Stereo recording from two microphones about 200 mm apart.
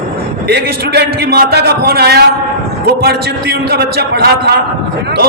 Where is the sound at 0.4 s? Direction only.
55° right (ahead or behind).